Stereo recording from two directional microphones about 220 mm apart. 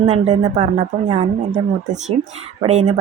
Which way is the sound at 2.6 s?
30° right (ahead or behind).